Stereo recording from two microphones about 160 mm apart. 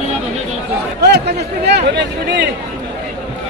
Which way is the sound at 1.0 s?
90° right.